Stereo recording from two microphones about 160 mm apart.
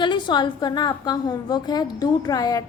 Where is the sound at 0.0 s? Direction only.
30° left (ahead or behind).